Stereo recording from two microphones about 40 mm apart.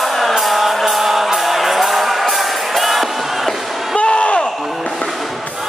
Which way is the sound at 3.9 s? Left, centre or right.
Left.